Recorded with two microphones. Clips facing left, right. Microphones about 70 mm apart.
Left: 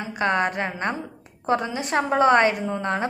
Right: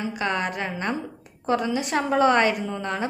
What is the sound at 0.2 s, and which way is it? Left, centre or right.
A woman's voice, left.